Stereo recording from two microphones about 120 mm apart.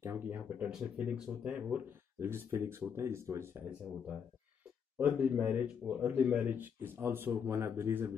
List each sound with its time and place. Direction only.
0.0 s speech: 20° right (ahead or behind)
4.9 s speech: 10° right (ahead or behind)